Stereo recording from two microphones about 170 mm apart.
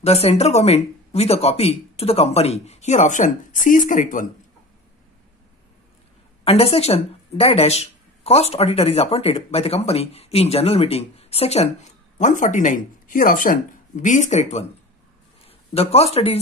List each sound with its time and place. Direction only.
0.0 s a woman's voice: 35° left (ahead or behind)
6.4 s a woman's voice: 35° left (ahead or behind)